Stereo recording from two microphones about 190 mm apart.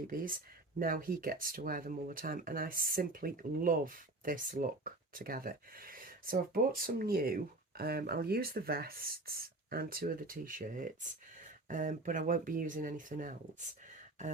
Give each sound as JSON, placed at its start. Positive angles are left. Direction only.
{"t": 0.1, "sound": "speech", "side_deg": -45}